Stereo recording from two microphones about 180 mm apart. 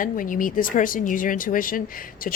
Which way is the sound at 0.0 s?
50° left (ahead or behind).